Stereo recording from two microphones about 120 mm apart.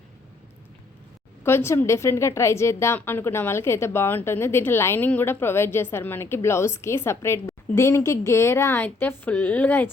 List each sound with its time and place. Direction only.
1.5 s a woman's voice: 20° left (ahead or behind)